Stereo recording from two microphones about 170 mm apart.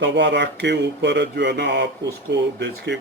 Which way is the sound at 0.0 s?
90° right.